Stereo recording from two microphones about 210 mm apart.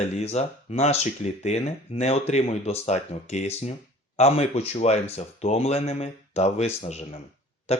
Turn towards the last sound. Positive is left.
turn(degrees=30)  # may be behind; listen again after turning